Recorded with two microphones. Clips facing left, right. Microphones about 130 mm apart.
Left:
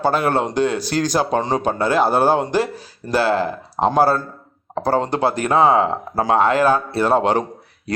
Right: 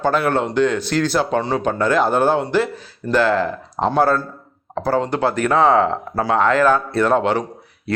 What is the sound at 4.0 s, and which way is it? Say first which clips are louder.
Speech: even; 35° left (ahead or behind).